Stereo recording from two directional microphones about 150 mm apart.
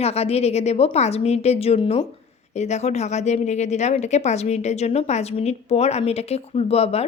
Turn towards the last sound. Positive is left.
turn(degrees=45)  # may be behind; listen again after turning